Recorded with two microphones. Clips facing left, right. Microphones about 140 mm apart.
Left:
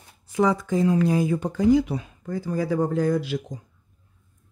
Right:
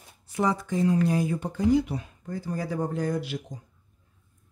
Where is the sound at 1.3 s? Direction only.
90° left.